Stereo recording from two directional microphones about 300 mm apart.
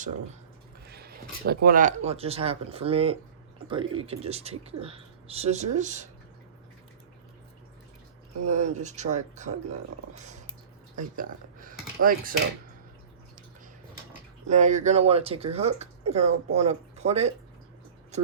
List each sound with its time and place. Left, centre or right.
0.9 s speech: right
8.4 s speech: right
10.2 s a sound: right
14.4 s speech: right